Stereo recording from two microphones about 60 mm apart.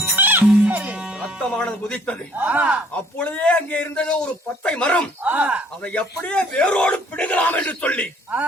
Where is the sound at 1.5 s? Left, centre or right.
Centre.